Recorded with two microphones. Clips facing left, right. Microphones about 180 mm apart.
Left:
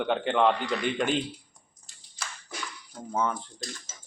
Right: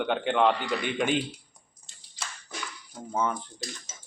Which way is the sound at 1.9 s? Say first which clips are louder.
Right 1 dB; 25° right (ahead or behind).